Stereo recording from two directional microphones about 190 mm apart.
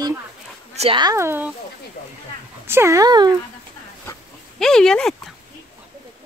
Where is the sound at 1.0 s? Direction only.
15° right (ahead or behind).